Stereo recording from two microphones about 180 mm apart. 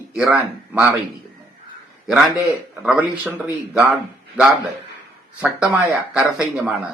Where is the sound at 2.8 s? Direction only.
5° right (ahead or behind).